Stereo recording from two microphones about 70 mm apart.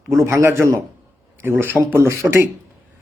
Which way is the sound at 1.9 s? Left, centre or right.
Right.